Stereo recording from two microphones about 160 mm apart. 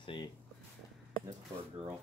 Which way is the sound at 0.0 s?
30° left (ahead or behind).